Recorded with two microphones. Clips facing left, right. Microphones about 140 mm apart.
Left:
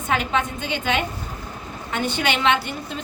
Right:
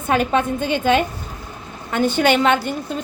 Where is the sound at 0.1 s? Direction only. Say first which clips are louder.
Right 5 dB; 45° right (ahead or behind).